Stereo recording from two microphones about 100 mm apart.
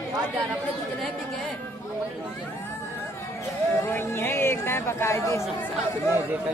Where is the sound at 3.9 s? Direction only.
25° left (ahead or behind).